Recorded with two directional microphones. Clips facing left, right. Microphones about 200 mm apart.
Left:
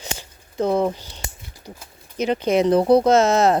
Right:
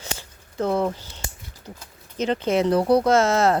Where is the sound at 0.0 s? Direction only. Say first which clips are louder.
Left 2 dB; 15° left (ahead or behind).